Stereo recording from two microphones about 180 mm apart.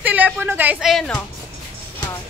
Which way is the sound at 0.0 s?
10° right (ahead or behind).